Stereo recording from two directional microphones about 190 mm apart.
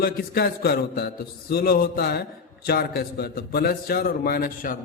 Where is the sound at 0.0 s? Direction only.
55° left (ahead or behind).